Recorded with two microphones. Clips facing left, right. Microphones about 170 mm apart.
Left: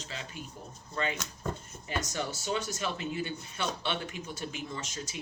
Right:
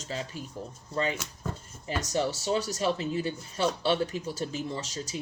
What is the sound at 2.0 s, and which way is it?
Speech, 35° right (ahead or behind).